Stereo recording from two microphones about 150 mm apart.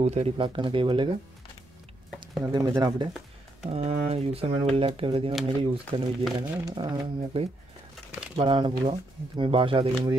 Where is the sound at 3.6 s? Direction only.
45° right (ahead or behind).